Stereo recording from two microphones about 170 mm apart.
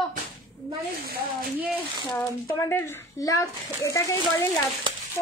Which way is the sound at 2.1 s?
15° left (ahead or behind).